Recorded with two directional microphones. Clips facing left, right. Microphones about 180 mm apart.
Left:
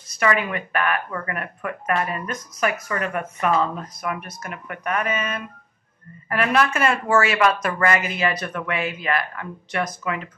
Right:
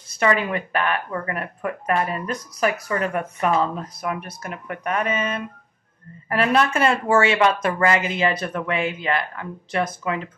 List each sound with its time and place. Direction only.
0.2 s speech: 30° right (ahead or behind)